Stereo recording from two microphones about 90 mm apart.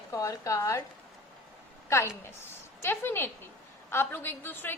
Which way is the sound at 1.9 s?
30° left (ahead or behind).